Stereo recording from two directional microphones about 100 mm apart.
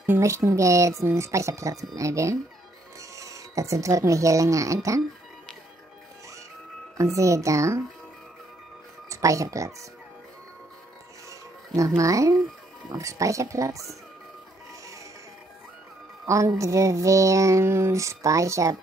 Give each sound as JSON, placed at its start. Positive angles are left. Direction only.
{"t": 0.2, "sound": "child singing", "side_deg": -30}
{"t": 3.0, "sound": "speech", "side_deg": -35}
{"t": 7.0, "sound": "child singing", "side_deg": -30}
{"t": 9.1, "sound": "child singing", "side_deg": -35}
{"t": 11.2, "sound": "music", "side_deg": -30}
{"t": 12.0, "sound": "child singing", "side_deg": -35}
{"t": 16.3, "sound": "child singing", "side_deg": -30}